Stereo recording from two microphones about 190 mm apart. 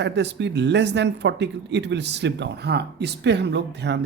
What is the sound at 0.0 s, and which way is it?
Speech, 65° right (ahead or behind).